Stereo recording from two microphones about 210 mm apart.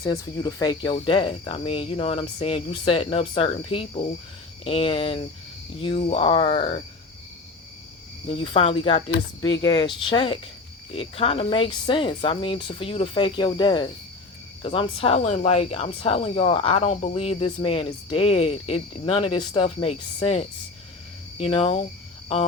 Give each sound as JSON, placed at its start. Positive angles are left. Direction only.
{"t": 0.0, "sound": "speech", "side_deg": 20}
{"t": 8.3, "sound": "speech", "side_deg": 25}